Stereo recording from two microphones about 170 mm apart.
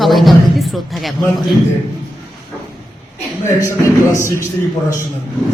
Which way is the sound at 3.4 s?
15° left (ahead or behind).